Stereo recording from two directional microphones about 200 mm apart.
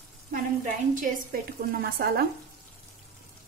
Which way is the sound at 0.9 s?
45° right (ahead or behind).